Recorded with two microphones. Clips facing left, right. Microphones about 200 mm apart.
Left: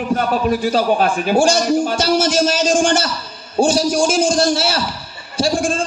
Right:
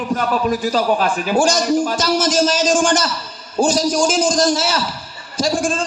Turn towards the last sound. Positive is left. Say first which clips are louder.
# left 1 dB
turn(degrees=30)  # may be behind; listen again after turning